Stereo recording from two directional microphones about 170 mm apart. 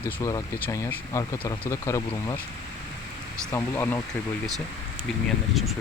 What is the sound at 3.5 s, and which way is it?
Speech, 10° left (ahead or behind).